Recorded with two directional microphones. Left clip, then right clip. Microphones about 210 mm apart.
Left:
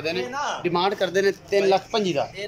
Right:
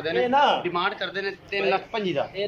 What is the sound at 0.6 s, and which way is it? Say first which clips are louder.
Speech: left 4 dB; 25° left (ahead or behind).